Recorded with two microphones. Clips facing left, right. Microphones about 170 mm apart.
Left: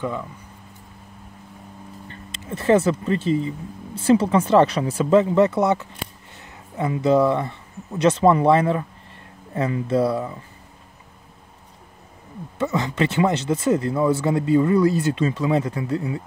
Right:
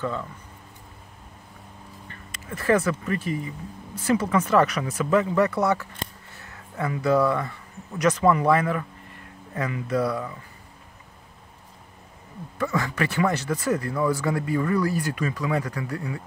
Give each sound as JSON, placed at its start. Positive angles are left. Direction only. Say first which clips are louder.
{"t": 0.0, "sound": "speech", "louder": "left 2 dB", "side_deg": 10}
{"t": 2.0, "sound": "speech", "louder": "left 4 dB", "side_deg": 25}
{"t": 12.5, "sound": "speech", "louder": "left 3 dB", "side_deg": 20}